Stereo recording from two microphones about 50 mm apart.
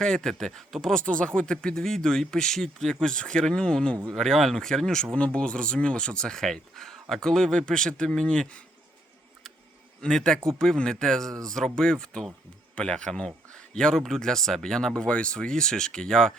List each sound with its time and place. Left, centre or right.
0.0 s speech: centre
1.0 s speech: left
4.1 s speech: centre; by 8.6 s left
10.0 s a man's voice: centre